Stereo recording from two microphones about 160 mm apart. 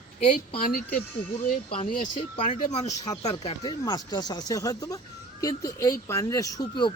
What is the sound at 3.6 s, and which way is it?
Speech, 25° left (ahead or behind).